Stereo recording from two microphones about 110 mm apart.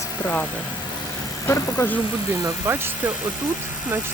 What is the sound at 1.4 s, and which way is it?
Speech, 25° left (ahead or behind).